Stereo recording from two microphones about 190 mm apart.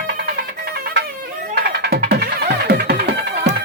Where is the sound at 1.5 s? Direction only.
60° right (ahead or behind).